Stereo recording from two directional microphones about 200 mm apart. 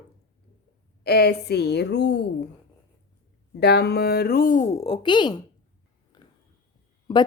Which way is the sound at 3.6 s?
55° left (ahead or behind).